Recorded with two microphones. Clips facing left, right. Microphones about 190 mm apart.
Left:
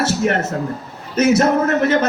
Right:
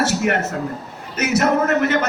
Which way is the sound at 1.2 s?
30° left (ahead or behind).